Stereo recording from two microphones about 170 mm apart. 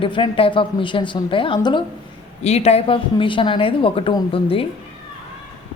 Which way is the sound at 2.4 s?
40° left (ahead or behind).